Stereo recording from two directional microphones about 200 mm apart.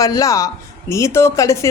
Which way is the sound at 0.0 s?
15° left (ahead or behind).